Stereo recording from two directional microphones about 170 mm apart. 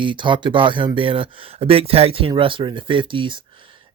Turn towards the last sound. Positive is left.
turn(degrees=-30)  # may be behind; listen again after turning